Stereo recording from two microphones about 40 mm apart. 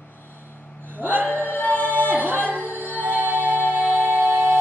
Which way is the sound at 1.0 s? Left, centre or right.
Right.